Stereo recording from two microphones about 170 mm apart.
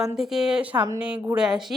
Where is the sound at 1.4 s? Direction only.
5° right (ahead or behind).